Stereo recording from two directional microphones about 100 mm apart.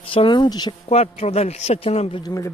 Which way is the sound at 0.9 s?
90° left.